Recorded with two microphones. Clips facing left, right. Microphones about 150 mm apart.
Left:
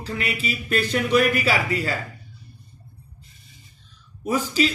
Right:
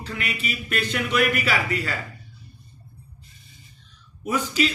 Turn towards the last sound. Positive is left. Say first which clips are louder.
# left 2 dB
turn(degrees=35)  # may be behind; listen again after turning